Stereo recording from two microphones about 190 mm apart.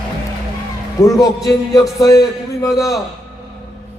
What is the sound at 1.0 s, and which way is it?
A man's voice, 15° left (ahead or behind).